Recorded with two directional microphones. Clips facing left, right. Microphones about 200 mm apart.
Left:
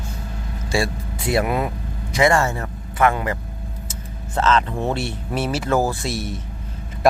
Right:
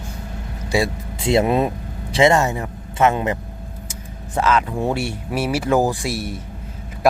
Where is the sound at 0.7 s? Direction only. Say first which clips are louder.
Right 2 dB; 20° right (ahead or behind).